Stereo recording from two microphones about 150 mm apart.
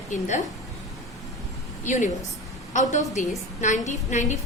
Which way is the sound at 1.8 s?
55° left (ahead or behind).